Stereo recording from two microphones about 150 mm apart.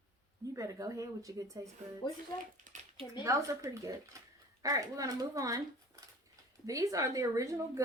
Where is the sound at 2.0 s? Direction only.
30° left (ahead or behind).